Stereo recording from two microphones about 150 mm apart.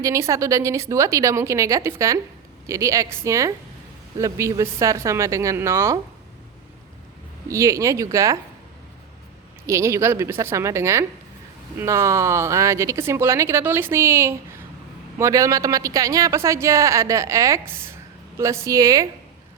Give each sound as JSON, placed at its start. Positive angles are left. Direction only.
{"t": 0.0, "sound": "speech", "side_deg": -20}
{"t": 7.4, "sound": "speech", "side_deg": -20}
{"t": 9.6, "sound": "speech", "side_deg": -20}